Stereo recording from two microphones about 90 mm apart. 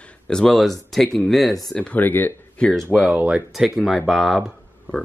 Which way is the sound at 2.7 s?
5° left (ahead or behind).